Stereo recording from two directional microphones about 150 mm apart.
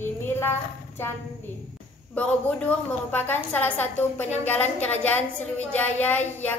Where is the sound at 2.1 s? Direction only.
5° left (ahead or behind).